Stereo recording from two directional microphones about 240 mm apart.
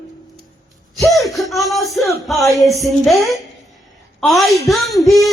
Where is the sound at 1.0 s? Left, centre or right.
Centre.